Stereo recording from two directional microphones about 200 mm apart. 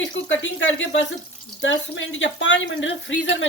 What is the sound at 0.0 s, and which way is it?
Speech, 70° left (ahead or behind).